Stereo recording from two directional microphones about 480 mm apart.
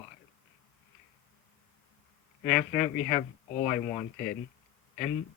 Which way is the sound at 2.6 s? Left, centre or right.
Centre.